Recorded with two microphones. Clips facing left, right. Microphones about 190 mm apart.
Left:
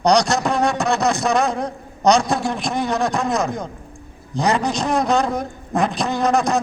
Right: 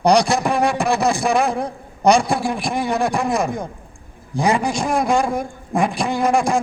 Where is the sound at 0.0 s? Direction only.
15° right (ahead or behind).